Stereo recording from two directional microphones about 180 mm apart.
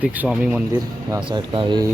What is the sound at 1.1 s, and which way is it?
Speech, 25° right (ahead or behind).